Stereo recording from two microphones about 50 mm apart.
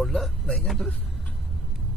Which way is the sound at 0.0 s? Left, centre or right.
Centre.